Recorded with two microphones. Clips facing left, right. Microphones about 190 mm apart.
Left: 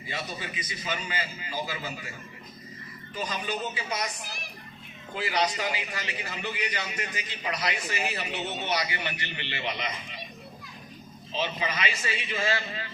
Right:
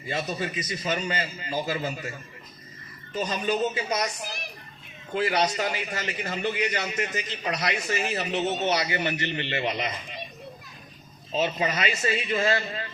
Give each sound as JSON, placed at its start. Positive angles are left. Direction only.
{"t": 0.1, "sound": "a man's voice", "side_deg": -45}
{"t": 3.2, "sound": "a man's voice", "side_deg": -45}
{"t": 5.1, "sound": "a man's voice", "side_deg": -45}
{"t": 11.3, "sound": "a man's voice", "side_deg": -45}